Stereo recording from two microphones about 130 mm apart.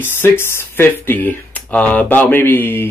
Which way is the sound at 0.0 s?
20° left (ahead or behind).